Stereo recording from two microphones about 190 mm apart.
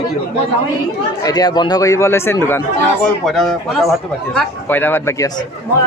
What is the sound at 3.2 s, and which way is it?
A man's voice, centre (ahead or behind).